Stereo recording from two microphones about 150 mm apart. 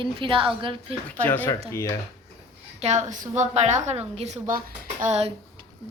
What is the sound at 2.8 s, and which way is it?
A woman's voice, 45° right (ahead or behind).